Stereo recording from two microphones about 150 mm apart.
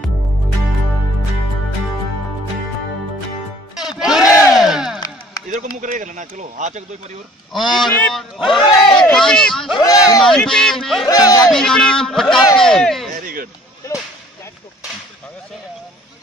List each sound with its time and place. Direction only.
4.2 s battle cry: 20° left (ahead or behind)
4.6 s a sound: 5° right (ahead or behind)
5.5 s speech: 60° right (ahead or behind)
7.5 s speech: centre (ahead or behind)
9.8 s a man's voice: 25° left (ahead or behind)
10.2 s speech: 5° left (ahead or behind)
11.1 s speech: 25° left (ahead or behind)
11.5 s speech: 5° left (ahead or behind)
13.1 s a sound: 70° right (ahead or behind)